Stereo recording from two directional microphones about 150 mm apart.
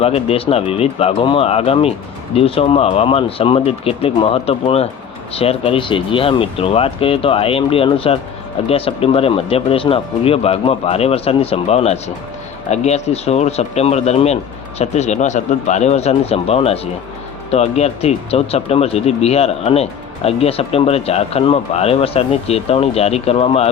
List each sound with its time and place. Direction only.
0.0 s speech: 40° left (ahead or behind)